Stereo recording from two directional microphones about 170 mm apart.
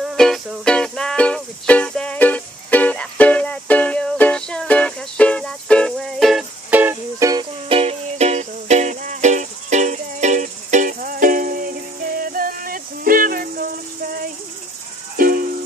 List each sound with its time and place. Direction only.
0.0 s music: centre (ahead or behind)
6.7 s music: 10° right (ahead or behind)
7.6 s music: 35° right (ahead or behind); by 13.7 s 60° right (ahead or behind)
15.1 s music: 55° right (ahead or behind)